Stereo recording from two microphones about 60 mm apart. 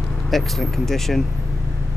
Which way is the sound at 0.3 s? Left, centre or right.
Centre.